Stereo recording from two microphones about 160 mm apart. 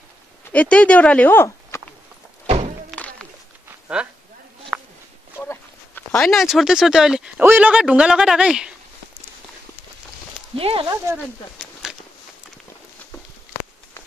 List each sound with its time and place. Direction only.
0.5 s speech: 10° left (ahead or behind)
2.9 s music: centre (ahead or behind)
4.7 s a sound: 5° right (ahead or behind)
5.4 s speech: 10° left (ahead or behind); by 8.7 s 5° right (ahead or behind)
10.5 s speech: 35° right (ahead or behind)
11.5 s a sound: 5° right (ahead or behind)